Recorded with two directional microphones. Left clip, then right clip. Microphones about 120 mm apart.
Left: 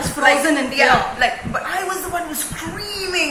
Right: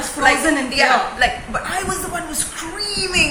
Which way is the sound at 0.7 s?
30° right (ahead or behind).